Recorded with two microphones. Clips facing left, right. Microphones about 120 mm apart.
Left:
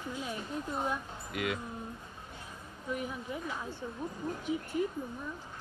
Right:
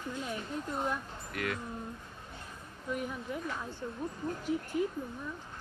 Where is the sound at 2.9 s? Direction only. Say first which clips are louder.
Right 1 dB; centre (ahead or behind).